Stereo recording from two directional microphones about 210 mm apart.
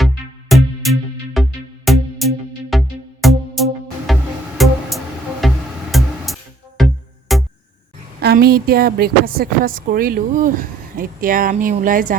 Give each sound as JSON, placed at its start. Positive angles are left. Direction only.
{"t": 0.0, "sound": "music", "side_deg": 0}
{"t": 8.2, "sound": "a woman's voice", "side_deg": -50}